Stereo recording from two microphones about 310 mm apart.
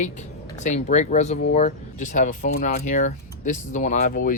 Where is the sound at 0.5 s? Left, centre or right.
Left.